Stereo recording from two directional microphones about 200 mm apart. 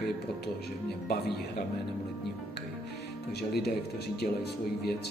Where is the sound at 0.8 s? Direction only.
55° left (ahead or behind).